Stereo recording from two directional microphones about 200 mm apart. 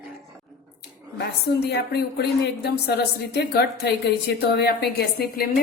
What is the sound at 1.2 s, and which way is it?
A woman's voice, 55° left (ahead or behind).